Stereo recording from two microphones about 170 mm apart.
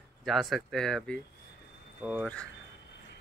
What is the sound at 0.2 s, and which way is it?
Speech, centre (ahead or behind).